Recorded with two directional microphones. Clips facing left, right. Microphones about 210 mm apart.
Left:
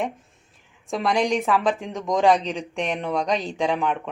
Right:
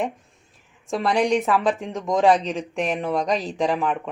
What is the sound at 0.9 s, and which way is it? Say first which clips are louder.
A woman's voice: right 2 dB; centre (ahead or behind).